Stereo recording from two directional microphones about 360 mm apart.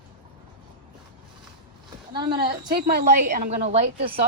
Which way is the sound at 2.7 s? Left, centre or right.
Right.